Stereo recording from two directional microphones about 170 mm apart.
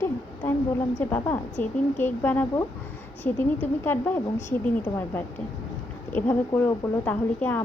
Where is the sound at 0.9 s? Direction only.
10° left (ahead or behind).